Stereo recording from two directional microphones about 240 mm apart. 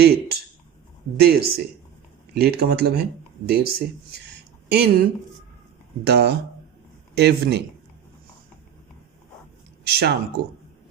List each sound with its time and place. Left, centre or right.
0.0 s speech: right
6.1 s speech: right
9.8 s speech: right